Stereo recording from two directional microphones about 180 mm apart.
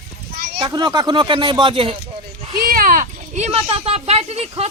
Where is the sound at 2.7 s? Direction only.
50° right (ahead or behind).